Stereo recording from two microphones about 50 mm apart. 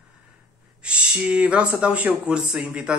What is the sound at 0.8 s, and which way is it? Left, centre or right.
A man's voice, right.